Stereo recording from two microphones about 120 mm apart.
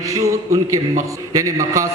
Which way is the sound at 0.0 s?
25° right (ahead or behind).